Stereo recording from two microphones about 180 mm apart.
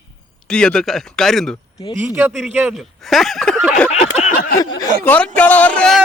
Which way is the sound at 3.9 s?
45° left (ahead or behind).